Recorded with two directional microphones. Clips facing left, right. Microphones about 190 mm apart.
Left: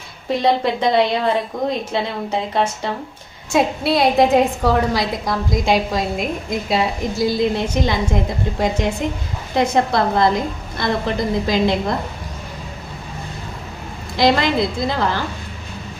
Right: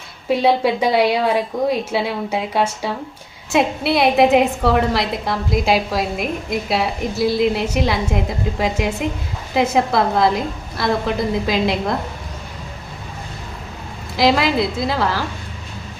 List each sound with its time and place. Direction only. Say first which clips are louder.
0.3 s a woman's voice: right 2 dB; 5° right (ahead or behind)
14.2 s a woman's voice: even; 5° right (ahead or behind)